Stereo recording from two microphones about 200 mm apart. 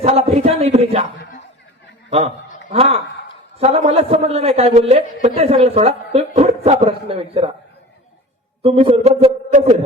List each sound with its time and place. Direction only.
0.0 s a woman's voice: 30° right (ahead or behind)
2.0 s a man's voice: 30° right (ahead or behind)
8.6 s a man's voice: 30° right (ahead or behind)